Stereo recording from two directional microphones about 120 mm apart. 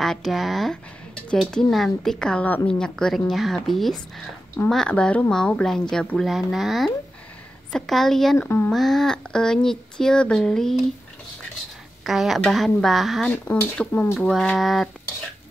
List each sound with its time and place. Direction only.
0.0 s a woman's voice: centre (ahead or behind)
8.4 s speech: 15° left (ahead or behind)
8.7 s a woman's voice: centre (ahead or behind)
12.0 s a woman's voice: centre (ahead or behind)
13.5 s a woman's voice: 15° left (ahead or behind)